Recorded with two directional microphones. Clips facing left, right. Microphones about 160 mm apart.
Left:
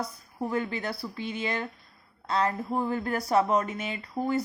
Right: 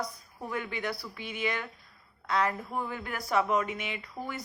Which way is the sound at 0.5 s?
35° left (ahead or behind).